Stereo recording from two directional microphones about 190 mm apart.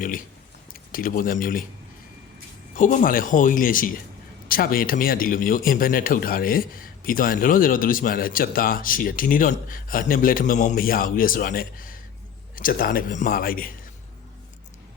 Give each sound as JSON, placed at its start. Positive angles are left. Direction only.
{"t": 0.7, "sound": "a man's voice", "side_deg": 50}
{"t": 2.7, "sound": "a man's voice", "side_deg": 45}